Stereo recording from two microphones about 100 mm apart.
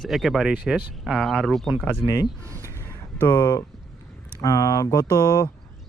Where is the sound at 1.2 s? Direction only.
Centre (ahead or behind).